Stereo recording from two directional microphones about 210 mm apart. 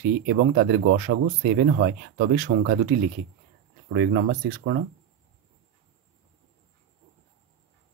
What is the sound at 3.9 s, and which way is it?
Speech, 55° right (ahead or behind).